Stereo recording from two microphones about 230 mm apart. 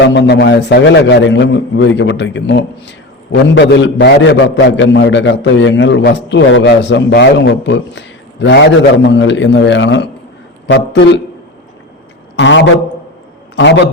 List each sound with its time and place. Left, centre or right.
0.0 s a man's voice: left
12.4 s a man's voice: left